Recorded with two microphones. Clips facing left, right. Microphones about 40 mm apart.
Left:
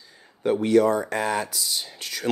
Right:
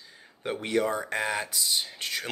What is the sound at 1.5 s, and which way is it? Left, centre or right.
Speech, right.